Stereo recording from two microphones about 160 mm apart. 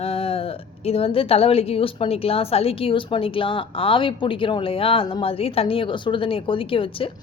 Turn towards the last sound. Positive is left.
turn(degrees=35)  # may be behind; listen again after turning